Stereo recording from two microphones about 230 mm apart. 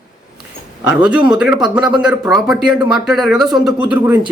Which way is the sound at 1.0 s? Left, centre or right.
Centre.